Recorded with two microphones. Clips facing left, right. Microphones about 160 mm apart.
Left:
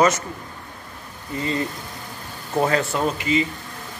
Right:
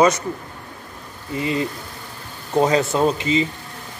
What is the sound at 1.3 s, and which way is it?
Speech, 15° right (ahead or behind).